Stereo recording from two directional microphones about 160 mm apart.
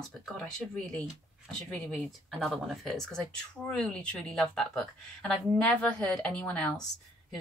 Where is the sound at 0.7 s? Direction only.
5° left (ahead or behind).